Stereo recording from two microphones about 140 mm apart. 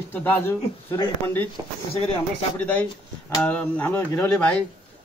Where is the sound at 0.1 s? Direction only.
15° left (ahead or behind).